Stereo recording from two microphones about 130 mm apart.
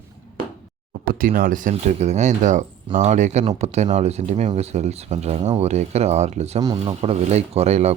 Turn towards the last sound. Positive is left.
turn(degrees=-55)  # may be behind; listen again after turning